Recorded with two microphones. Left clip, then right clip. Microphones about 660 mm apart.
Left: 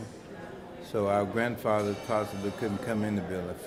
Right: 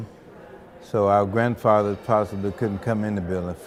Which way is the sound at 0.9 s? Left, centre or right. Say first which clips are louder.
Right 8 dB; right.